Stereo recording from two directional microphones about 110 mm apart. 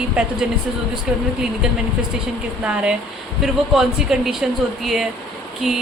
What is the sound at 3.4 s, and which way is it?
A woman's voice, 5° right (ahead or behind).